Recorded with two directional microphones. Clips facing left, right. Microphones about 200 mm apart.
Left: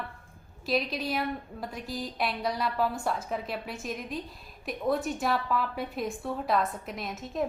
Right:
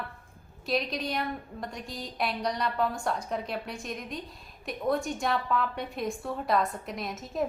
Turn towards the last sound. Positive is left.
turn(degrees=0)  # may be behind; listen again after turning